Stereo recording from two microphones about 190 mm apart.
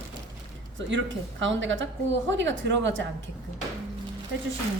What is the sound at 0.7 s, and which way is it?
Speech, 75° right (ahead or behind).